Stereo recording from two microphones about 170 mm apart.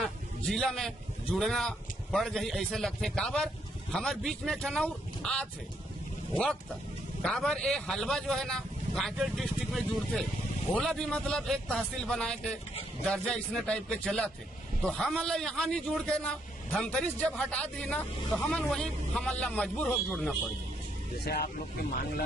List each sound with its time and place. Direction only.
0.0 s a man's voice: centre (ahead or behind)
7.2 s speech: 5° left (ahead or behind)
21.2 s speech: 70° left (ahead or behind)